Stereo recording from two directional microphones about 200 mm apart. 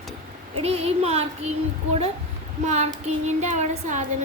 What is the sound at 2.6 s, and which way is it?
Music, 35° right (ahead or behind).